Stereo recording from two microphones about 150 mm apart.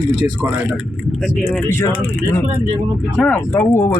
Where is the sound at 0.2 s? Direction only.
15° right (ahead or behind).